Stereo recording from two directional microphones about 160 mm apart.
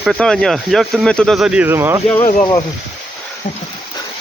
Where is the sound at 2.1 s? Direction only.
35° left (ahead or behind).